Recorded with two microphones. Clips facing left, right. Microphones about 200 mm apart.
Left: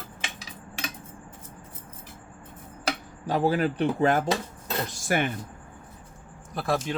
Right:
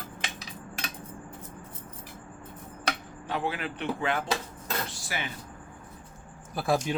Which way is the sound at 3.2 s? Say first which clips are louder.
Left 8 dB; 35° left (ahead or behind).